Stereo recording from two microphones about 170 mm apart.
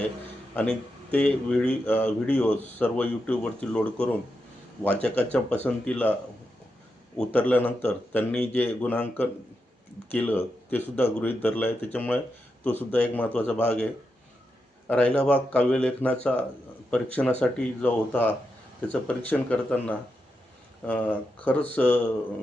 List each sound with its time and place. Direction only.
0.5 s a man's voice: 10° left (ahead or behind)
7.2 s a man's voice: 10° left (ahead or behind)
14.8 s a man's voice: 10° left (ahead or behind)